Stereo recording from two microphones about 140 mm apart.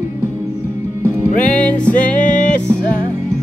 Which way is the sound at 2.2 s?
65° left (ahead or behind).